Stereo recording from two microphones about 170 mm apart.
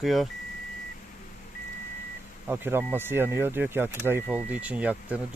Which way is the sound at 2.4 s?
10° right (ahead or behind).